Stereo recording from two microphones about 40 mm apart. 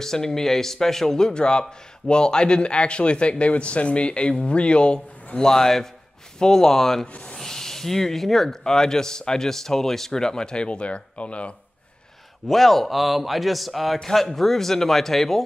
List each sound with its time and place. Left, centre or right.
0.0 s a man's voice: centre; by 11.5 s left
12.4 s speech: centre